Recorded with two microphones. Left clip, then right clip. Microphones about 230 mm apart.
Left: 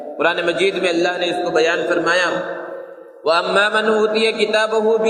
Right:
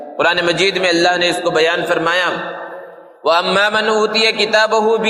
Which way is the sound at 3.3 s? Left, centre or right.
Right.